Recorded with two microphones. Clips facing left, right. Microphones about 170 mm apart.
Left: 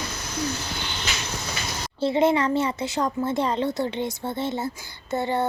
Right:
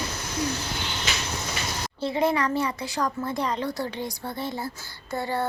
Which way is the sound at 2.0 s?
25° left (ahead or behind).